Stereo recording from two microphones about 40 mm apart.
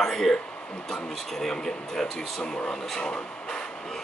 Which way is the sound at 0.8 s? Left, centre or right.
Centre.